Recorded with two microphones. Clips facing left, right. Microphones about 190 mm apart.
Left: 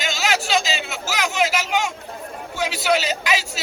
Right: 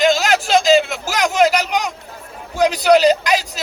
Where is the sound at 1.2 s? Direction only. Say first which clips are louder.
Right 7 dB; 40° right (ahead or behind).